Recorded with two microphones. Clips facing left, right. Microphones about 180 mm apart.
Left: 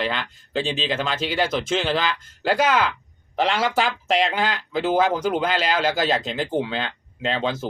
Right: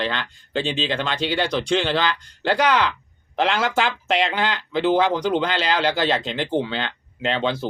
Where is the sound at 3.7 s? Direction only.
40° left (ahead or behind).